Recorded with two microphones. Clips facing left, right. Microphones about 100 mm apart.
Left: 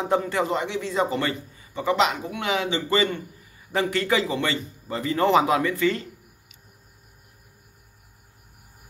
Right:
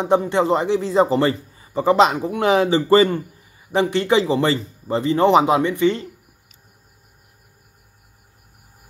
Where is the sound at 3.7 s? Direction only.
25° right (ahead or behind).